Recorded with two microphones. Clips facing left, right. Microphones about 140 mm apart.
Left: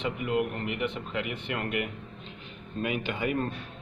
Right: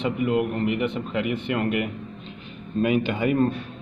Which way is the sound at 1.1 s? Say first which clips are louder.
Right 8 dB; 25° right (ahead or behind).